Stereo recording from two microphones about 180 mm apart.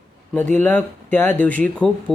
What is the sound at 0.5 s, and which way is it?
Speech, 10° left (ahead or behind).